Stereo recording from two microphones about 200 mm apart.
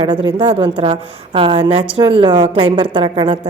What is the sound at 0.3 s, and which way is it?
A woman's voice, 25° right (ahead or behind).